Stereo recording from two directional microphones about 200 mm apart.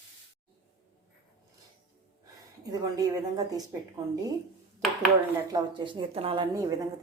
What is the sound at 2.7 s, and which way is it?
Speech, 20° right (ahead or behind).